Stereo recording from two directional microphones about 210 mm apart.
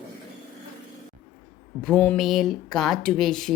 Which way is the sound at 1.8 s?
5° left (ahead or behind).